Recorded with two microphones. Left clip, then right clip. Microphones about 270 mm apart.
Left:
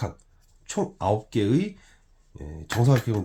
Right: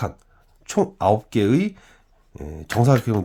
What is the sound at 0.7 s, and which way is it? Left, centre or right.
Speech, right.